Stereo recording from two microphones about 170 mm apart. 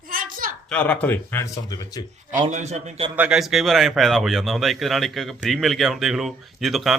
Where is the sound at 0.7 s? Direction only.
10° left (ahead or behind).